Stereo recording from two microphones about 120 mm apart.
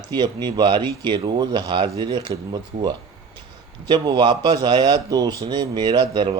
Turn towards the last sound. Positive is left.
turn(degrees=-40)  # may be behind; listen again after turning